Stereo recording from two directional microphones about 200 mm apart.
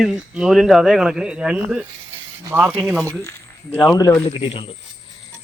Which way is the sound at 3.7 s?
15° left (ahead or behind).